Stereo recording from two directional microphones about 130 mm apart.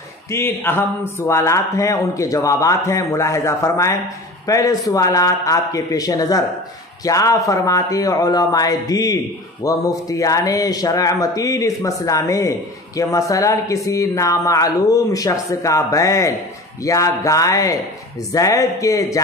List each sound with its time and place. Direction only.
0.3 s a man's voice: 20° left (ahead or behind)